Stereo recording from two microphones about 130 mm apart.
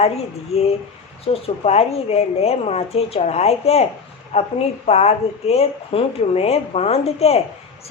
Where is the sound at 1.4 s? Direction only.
55° left (ahead or behind).